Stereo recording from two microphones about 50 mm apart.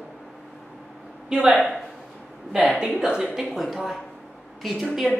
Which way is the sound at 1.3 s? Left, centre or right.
Centre.